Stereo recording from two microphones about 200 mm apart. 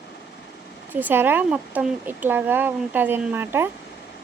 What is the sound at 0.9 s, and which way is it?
Speech, 10° right (ahead or behind).